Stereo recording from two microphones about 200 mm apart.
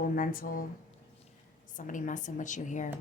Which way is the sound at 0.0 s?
45° left (ahead or behind).